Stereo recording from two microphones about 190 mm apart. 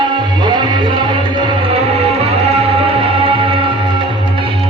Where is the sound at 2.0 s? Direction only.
30° right (ahead or behind).